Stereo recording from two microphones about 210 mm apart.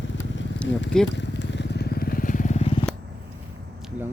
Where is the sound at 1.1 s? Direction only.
55° left (ahead or behind); by 2.8 s 30° left (ahead or behind).